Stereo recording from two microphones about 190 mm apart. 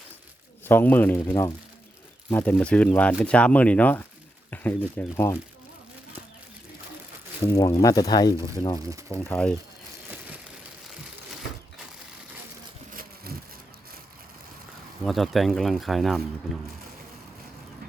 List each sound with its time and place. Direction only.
0.6 s speech: 10° left (ahead or behind)
2.3 s speech: 5° left (ahead or behind)
7.4 s speech: 15° left (ahead or behind)
9.2 s speech: 10° left (ahead or behind)
12.9 s a sound: 50° right (ahead or behind)
15.0 s speech: centre (ahead or behind)